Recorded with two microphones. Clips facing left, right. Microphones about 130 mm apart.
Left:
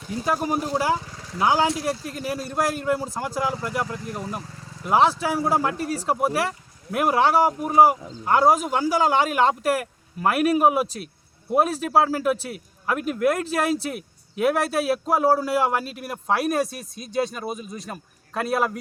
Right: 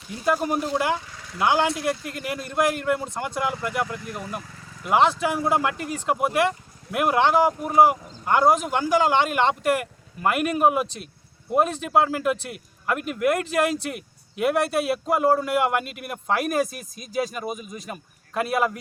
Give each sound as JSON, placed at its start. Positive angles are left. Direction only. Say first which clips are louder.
{"t": 0.3, "sound": "a man's voice", "louder": "even", "side_deg": 0}
{"t": 0.6, "sound": "speech", "louder": "left 1 dB", "side_deg": 35}
{"t": 2.5, "sound": "a man's voice", "louder": "right 2 dB", "side_deg": 0}
{"t": 3.4, "sound": "speech", "louder": "right 1 dB", "side_deg": 35}
{"t": 4.9, "sound": "a man's voice", "louder": "even", "side_deg": 0}
{"t": 5.7, "sound": "speech", "louder": "left 1 dB", "side_deg": 35}
{"t": 6.9, "sound": "a man's voice", "louder": "even", "side_deg": 0}
{"t": 17.5, "sound": "speech", "louder": "left 1 dB", "side_deg": 30}
{"t": 17.7, "sound": "a man's voice", "louder": "even", "side_deg": 0}